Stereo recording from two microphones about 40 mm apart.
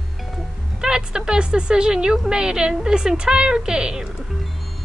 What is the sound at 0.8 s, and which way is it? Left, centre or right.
A woman's voice, centre.